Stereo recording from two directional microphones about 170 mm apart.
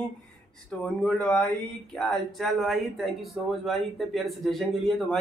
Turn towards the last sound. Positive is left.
turn(degrees=0)  # may be behind; listen again after turning